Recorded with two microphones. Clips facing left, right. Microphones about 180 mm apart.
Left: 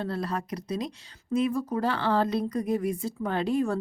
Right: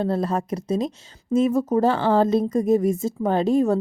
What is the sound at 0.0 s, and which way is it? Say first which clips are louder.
A woman's voice: right 8 dB; 45° right (ahead or behind).